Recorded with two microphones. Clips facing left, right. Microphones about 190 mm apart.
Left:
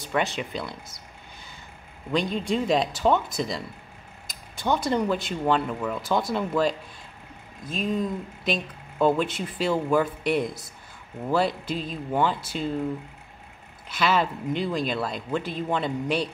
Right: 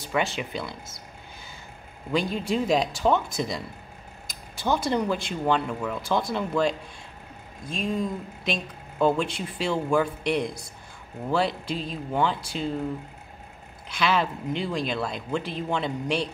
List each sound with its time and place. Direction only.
0.0 s speech: centre (ahead or behind)
2.1 s speech: 5° right (ahead or behind)
13.8 s speech: centre (ahead or behind)